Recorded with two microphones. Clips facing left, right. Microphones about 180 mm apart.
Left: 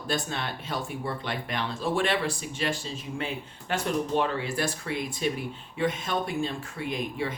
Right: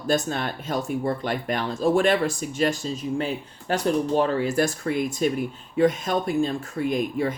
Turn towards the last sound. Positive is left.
turn(degrees=-45)  # may be behind; listen again after turning